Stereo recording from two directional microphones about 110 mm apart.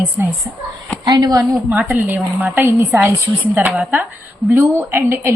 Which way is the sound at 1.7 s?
15° right (ahead or behind).